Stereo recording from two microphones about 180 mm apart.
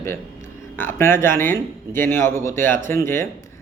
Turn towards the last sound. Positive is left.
turn(degrees=15)  # may be behind; listen again after turning